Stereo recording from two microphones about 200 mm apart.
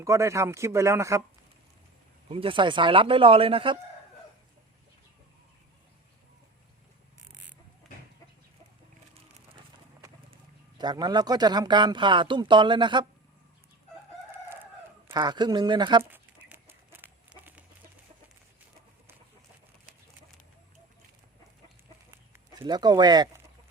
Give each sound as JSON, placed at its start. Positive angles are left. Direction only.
{"t": 0.0, "sound": "speech", "side_deg": -15}
{"t": 2.3, "sound": "speech", "side_deg": -25}
{"t": 10.8, "sound": "speech", "side_deg": -20}
{"t": 15.0, "sound": "speech", "side_deg": -20}
{"t": 16.1, "sound": "chicken", "side_deg": -10}
{"t": 22.6, "sound": "speech", "side_deg": -20}